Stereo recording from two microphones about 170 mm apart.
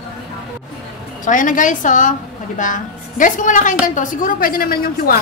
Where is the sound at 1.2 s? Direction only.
50° left (ahead or behind).